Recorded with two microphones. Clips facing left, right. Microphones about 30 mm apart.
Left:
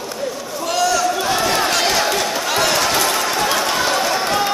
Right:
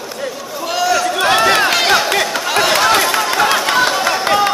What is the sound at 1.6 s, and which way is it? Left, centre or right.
Crowd, right.